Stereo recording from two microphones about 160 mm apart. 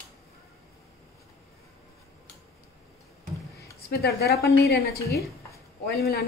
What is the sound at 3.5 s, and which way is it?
A woman's voice, 80° left.